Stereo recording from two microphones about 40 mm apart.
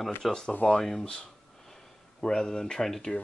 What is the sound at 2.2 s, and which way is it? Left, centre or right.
Speech, centre.